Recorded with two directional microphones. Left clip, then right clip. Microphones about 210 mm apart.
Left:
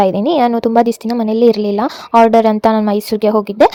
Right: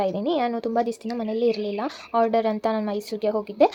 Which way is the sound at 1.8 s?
45° left (ahead or behind).